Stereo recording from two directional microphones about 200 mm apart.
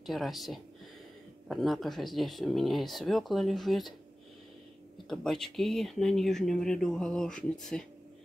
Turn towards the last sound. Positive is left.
turn(degrees=5)  # may be behind; listen again after turning